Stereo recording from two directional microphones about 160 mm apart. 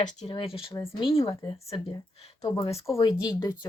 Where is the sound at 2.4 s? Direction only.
25° left (ahead or behind).